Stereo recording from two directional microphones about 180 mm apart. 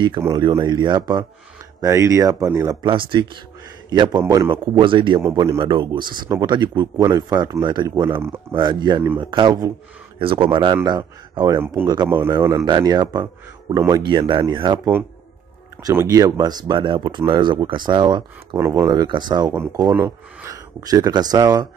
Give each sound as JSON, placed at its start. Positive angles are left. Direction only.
{"t": 0.4, "sound": "speech", "side_deg": -25}
{"t": 5.2, "sound": "a man's voice", "side_deg": -15}
{"t": 5.6, "sound": "speech", "side_deg": -25}
{"t": 7.8, "sound": "a man's voice", "side_deg": -15}
{"t": 8.5, "sound": "a man's voice", "side_deg": -25}
{"t": 15.8, "sound": "speech", "side_deg": -15}
{"t": 19.5, "sound": "speech", "side_deg": -10}